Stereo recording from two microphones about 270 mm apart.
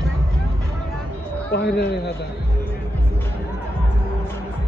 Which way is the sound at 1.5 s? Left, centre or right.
Left.